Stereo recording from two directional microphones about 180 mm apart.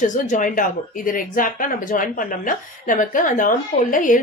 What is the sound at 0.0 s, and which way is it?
Speech, 45° left (ahead or behind).